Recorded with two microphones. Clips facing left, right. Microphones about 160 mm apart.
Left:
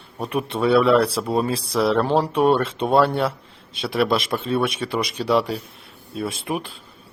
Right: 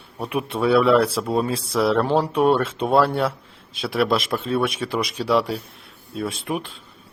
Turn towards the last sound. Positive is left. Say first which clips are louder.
# even
turn(degrees=0)  # may be behind; listen again after turning